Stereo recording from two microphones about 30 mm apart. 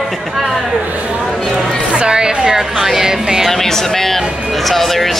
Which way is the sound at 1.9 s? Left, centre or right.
Right.